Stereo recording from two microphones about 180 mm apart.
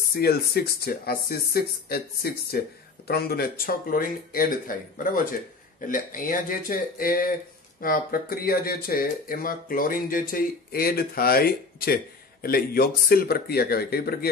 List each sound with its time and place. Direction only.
0.1 s speech: 60° left (ahead or behind)